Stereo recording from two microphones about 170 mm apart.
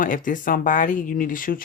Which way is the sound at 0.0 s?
50° left (ahead or behind).